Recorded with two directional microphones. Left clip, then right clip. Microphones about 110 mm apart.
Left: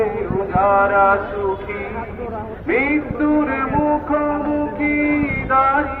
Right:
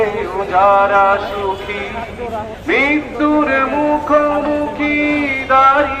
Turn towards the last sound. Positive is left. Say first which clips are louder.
# right 5 dB
turn(degrees=-35)  # may be behind; listen again after turning